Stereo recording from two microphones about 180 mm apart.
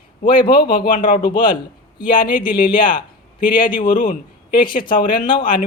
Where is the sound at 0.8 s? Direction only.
45° left (ahead or behind).